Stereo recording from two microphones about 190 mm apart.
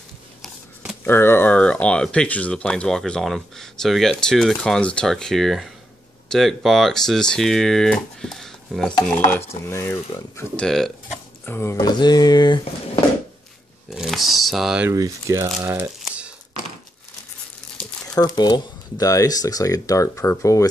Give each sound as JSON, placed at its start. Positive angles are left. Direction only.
{"t": 1.0, "sound": "speech", "side_deg": 10}
{"t": 13.8, "sound": "speech", "side_deg": 0}
{"t": 14.9, "sound": "speech", "side_deg": -15}
{"t": 16.0, "sound": "a sound", "side_deg": -5}
{"t": 18.0, "sound": "speech", "side_deg": 20}